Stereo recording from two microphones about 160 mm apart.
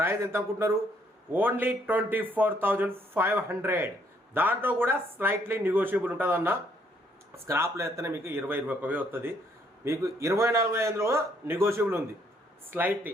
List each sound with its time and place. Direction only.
0.0 s speech: 15° right (ahead or behind)